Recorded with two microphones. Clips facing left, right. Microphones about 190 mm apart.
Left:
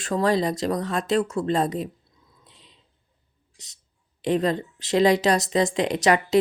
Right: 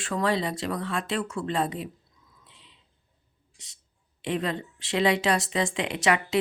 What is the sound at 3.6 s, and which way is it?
Speech, 35° left (ahead or behind).